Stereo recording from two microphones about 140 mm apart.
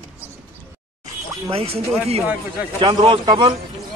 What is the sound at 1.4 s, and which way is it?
Speech, 45° right (ahead or behind).